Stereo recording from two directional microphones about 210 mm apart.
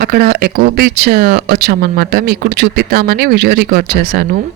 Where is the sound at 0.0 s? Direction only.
45° right (ahead or behind).